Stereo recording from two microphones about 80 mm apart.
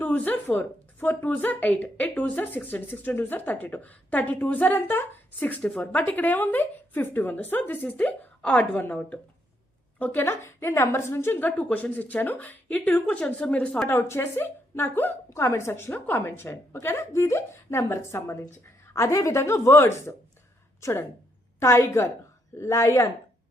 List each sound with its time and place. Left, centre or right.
0.0 s a woman's voice: left
13.8 s speech: left
15.3 s a woman's voice: left
16.2 s a woman's voice: left
21.6 s a woman's voice: left